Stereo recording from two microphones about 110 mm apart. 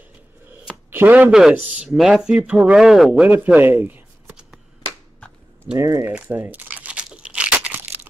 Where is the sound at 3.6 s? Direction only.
15° right (ahead or behind).